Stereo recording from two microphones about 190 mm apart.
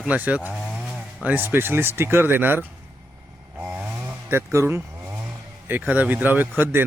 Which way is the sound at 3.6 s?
10° right (ahead or behind).